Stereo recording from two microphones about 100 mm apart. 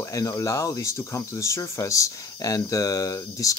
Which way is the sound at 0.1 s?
35° left (ahead or behind).